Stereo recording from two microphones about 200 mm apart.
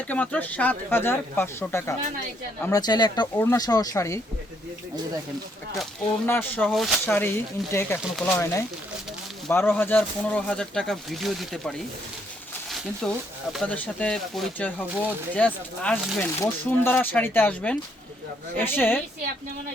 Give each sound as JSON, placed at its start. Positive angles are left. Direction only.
{"t": 0.1, "sound": "speech", "side_deg": 10}
{"t": 5.7, "sound": "speech", "side_deg": 0}
{"t": 12.7, "sound": "speech", "side_deg": 0}